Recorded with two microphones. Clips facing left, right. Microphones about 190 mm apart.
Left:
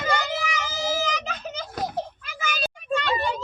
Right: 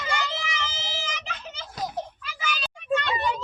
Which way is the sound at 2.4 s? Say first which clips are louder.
Left 4 dB; 45° left (ahead or behind).